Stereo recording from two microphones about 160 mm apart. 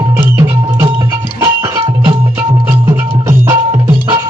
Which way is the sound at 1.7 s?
25° right (ahead or behind).